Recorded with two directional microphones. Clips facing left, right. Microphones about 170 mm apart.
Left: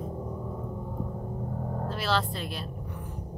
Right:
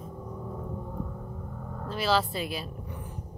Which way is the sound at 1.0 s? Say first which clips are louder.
Left 5 dB; 30° left (ahead or behind).